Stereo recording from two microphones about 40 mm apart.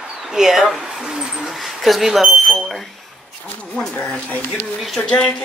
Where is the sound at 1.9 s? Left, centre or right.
Centre.